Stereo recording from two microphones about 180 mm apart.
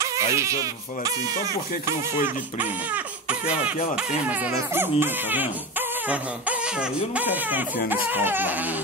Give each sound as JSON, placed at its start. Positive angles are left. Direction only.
{"t": 0.0, "sound": "speech", "side_deg": -15}
{"t": 2.2, "sound": "speech", "side_deg": -10}